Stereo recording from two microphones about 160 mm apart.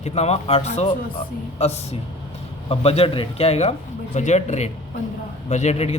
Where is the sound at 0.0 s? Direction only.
40° left (ahead or behind).